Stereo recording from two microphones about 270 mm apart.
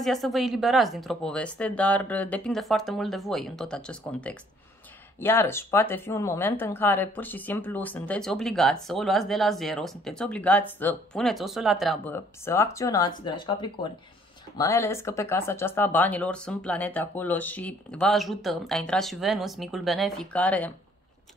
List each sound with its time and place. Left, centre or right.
0.0 s speech: centre